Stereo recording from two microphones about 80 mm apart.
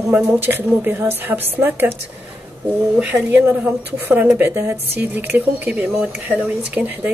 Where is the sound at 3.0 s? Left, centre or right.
Right.